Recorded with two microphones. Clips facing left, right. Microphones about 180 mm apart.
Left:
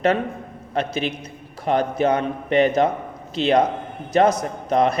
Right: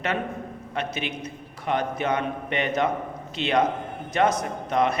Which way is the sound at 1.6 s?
35° left (ahead or behind).